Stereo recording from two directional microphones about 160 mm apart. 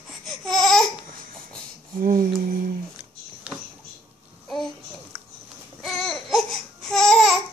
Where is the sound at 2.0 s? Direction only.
65° right (ahead or behind).